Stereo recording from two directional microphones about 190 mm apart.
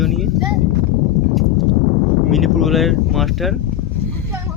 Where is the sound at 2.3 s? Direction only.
Centre (ahead or behind).